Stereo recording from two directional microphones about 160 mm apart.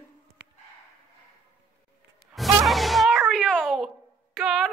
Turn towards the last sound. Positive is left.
turn(degrees=0)  # may be behind; listen again after turning